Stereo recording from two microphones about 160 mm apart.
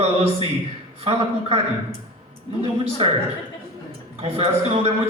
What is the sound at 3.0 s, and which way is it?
Speech, 30° right (ahead or behind).